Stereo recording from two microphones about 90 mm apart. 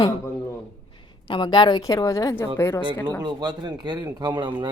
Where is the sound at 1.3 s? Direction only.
60° left (ahead or behind).